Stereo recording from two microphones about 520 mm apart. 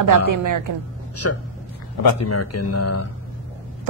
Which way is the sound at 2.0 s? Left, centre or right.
Left.